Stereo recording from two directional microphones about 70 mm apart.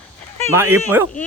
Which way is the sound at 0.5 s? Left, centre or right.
Right.